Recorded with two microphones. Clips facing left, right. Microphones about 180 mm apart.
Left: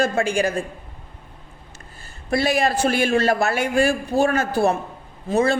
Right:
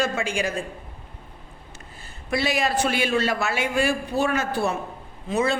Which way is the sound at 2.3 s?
50° left (ahead or behind).